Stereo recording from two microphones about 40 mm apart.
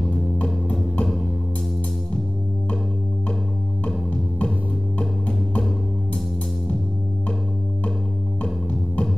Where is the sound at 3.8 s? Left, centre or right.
Left.